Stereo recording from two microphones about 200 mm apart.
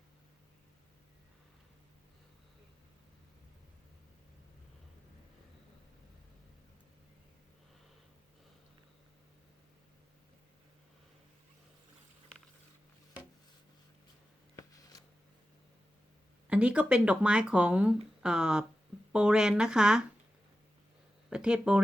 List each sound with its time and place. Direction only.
14.5 s a sound: 15° left (ahead or behind)
16.5 s speech: 5° right (ahead or behind)
21.2 s speech: 5° right (ahead or behind)